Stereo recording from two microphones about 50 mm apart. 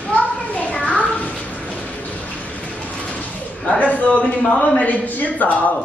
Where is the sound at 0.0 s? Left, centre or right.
Left.